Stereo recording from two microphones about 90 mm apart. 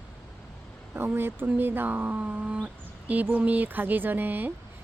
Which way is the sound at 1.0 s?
25° right (ahead or behind).